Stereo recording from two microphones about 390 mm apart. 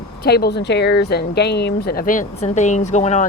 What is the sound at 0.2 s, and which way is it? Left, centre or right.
Speech, left.